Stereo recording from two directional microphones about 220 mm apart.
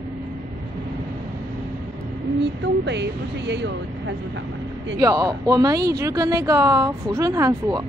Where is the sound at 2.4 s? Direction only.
50° right (ahead or behind).